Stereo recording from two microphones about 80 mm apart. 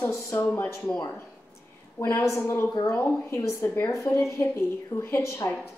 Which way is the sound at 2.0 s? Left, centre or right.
Left.